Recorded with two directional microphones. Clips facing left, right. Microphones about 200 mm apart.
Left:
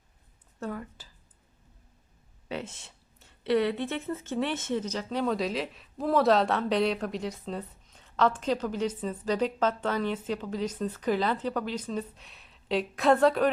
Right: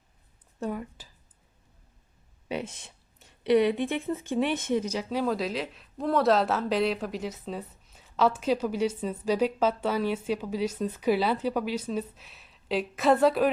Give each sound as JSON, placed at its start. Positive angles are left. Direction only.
{"t": 0.6, "sound": "speech", "side_deg": -15}
{"t": 2.5, "sound": "speech", "side_deg": -15}